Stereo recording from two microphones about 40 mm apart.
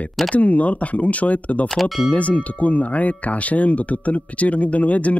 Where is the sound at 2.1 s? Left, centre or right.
Left.